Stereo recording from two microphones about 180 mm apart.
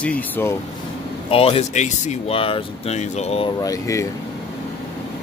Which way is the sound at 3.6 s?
20° left (ahead or behind).